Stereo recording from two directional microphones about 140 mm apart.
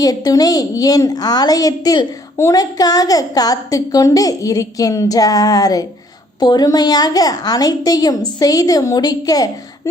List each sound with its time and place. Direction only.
0.0 s a woman's voice: 25° left (ahead or behind)